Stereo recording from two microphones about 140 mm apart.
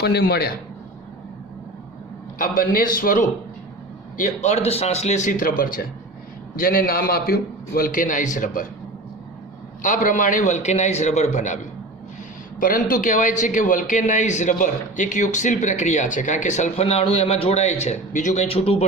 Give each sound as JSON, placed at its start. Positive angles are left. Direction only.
{"t": 0.2, "sound": "a man's voice", "side_deg": 90}
{"t": 2.4, "sound": "a man's voice", "side_deg": 90}
{"t": 4.2, "sound": "a man's voice", "side_deg": 55}
{"t": 9.8, "sound": "a man's voice", "side_deg": 65}
{"t": 12.5, "sound": "a man's voice", "side_deg": 85}
{"t": 18.4, "sound": "speech", "side_deg": 45}